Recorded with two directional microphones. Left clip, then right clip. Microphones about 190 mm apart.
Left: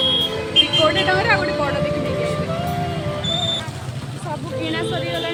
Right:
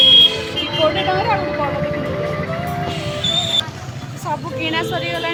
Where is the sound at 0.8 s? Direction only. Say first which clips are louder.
Even; 5° right (ahead or behind).